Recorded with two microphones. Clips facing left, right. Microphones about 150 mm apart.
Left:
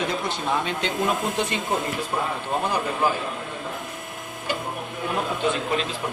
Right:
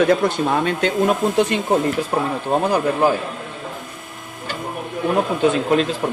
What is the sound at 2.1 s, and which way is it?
Speech, 65° right (ahead or behind).